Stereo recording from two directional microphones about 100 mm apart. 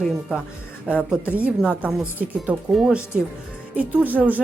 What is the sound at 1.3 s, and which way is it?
Speech, 15° right (ahead or behind).